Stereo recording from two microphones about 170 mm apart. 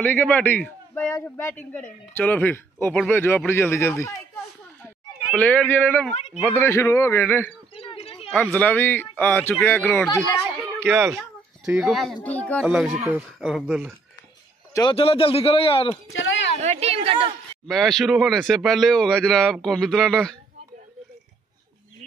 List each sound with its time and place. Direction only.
0.0 s a man's voice: 10° left (ahead or behind)
7.7 s a sound: 35° left (ahead or behind)
8.4 s a man's voice: 10° left (ahead or behind)
10.6 s a sound: 15° right (ahead or behind)
11.6 s a man's voice: 5° right (ahead or behind)
12.6 s a man's voice: 5° right (ahead or behind)
14.7 s a man's voice: 25° left (ahead or behind)
15.0 s a man's voice: 35° left (ahead or behind)
16.6 s a woman's voice: 35° right (ahead or behind)
17.6 s a man's voice: centre (ahead or behind)